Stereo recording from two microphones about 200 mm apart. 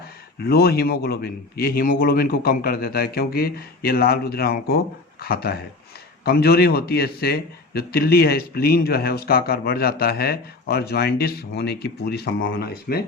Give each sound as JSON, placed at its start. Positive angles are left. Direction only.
{"t": 0.3, "sound": "a man's voice", "side_deg": 50}